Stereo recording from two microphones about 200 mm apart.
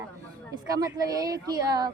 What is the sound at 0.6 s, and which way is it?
A woman's voice, 15° right (ahead or behind).